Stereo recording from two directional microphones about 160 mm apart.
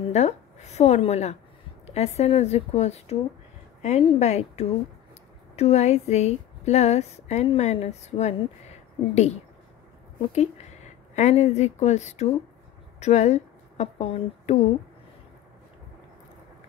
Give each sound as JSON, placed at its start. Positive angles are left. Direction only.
{"t": 0.1, "sound": "a woman's voice", "side_deg": 45}
{"t": 11.1, "sound": "a woman's voice", "side_deg": 45}